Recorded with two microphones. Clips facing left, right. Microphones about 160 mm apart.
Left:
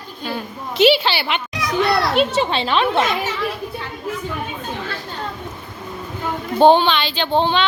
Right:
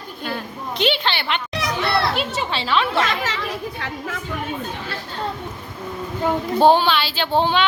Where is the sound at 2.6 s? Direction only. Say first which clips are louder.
Right 1 dB; 20° left (ahead or behind).